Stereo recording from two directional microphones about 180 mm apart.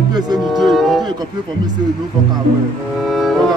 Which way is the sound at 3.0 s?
Centre (ahead or behind).